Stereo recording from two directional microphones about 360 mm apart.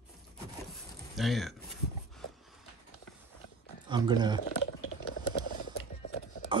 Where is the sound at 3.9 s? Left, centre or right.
Centre.